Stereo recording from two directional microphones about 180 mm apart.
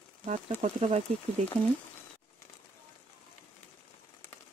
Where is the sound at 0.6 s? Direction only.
40° right (ahead or behind).